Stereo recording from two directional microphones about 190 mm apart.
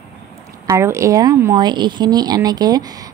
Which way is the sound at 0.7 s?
15° right (ahead or behind).